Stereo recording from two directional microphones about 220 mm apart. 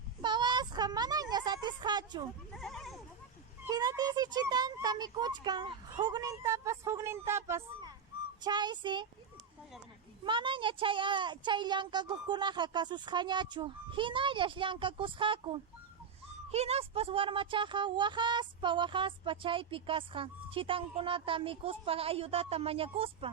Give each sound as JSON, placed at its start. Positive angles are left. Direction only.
{"t": 0.2, "sound": "a sound", "side_deg": -20}
{"t": 2.5, "sound": "goat", "side_deg": 0}
{"t": 3.7, "sound": "speech", "side_deg": -15}
{"t": 10.2, "sound": "speech", "side_deg": -20}